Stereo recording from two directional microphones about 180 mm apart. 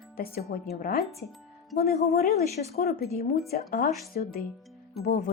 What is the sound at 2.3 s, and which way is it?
Speech, 35° left (ahead or behind).